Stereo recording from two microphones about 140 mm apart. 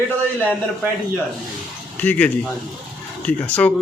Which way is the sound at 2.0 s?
10° left (ahead or behind).